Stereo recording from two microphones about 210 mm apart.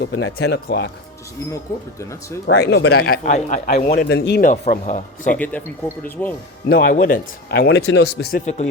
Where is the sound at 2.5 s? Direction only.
55° left (ahead or behind).